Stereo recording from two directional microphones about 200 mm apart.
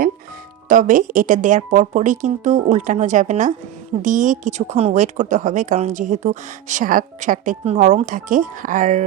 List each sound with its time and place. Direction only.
0.7 s speech: 40° right (ahead or behind)